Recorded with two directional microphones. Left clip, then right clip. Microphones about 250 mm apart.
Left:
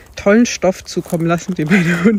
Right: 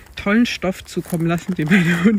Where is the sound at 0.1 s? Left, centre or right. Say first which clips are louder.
Left 6 dB; centre.